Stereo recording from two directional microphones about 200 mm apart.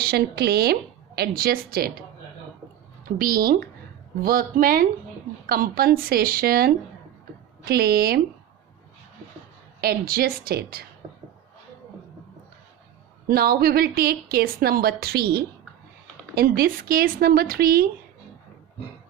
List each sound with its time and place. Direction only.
0.0 s a woman's voice: 50° right (ahead or behind)
9.8 s a woman's voice: 50° right (ahead or behind)
13.2 s a woman's voice: 50° right (ahead or behind)